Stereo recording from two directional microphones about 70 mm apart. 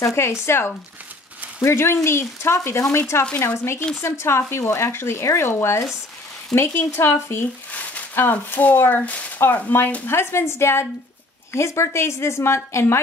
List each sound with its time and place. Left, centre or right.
0.0 s speech: left
3.3 s speech: left
4.0 s speech: left
7.7 s a sound: left
8.2 s speech: left